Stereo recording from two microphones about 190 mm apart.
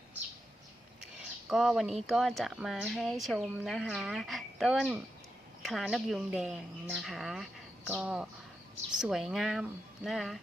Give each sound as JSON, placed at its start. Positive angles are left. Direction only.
{"t": 1.5, "sound": "speech", "side_deg": 0}